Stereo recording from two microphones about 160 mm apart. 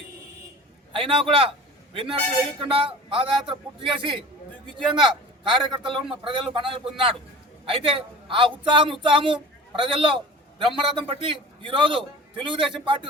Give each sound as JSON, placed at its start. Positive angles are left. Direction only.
{"t": 0.9, "sound": "a man's voice", "side_deg": -35}